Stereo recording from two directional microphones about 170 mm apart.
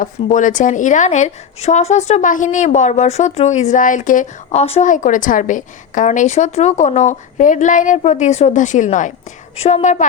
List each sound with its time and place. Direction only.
0.0 s a woman's voice: 50° left (ahead or behind)
4.6 s a woman's voice: 35° left (ahead or behind)
4.9 s a woman's voice: 50° left (ahead or behind)